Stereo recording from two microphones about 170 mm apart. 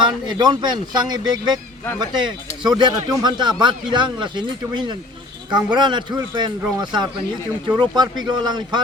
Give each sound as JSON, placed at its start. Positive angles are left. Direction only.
{"t": 0.3, "sound": "speech", "side_deg": -25}